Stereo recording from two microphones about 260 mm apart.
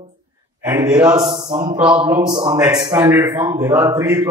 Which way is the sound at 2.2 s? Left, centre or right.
Centre.